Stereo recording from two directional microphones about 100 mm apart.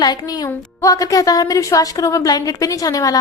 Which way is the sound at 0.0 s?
45° left (ahead or behind).